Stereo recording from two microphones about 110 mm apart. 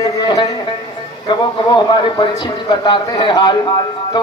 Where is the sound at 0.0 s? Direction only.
35° left (ahead or behind).